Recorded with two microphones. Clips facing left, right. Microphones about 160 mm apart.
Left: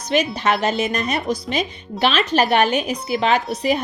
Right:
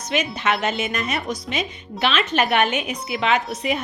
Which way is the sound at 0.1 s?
35° left (ahead or behind).